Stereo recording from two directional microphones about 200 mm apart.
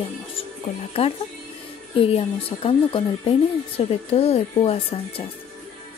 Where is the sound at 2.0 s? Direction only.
30° left (ahead or behind).